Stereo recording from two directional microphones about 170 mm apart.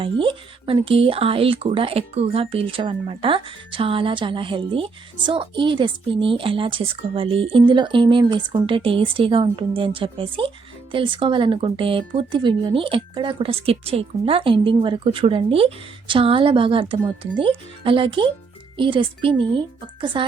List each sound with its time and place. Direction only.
0.0 s speech: 30° right (ahead or behind)